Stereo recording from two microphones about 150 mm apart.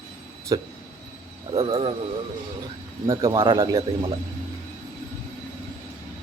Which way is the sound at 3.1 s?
25° right (ahead or behind).